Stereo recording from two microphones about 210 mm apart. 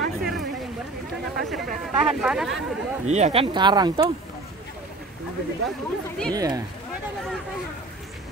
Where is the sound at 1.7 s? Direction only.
30° right (ahead or behind).